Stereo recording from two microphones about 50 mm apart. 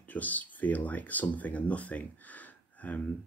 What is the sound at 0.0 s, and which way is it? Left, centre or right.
Speech, left.